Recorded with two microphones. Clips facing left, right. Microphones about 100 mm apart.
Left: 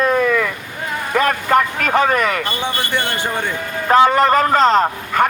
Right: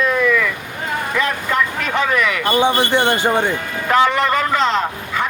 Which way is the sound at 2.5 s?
20° right (ahead or behind).